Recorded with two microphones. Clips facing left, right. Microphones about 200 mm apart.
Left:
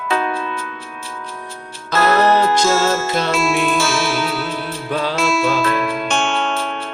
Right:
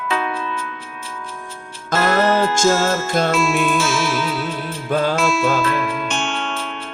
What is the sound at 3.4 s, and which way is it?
Music, 40° left (ahead or behind).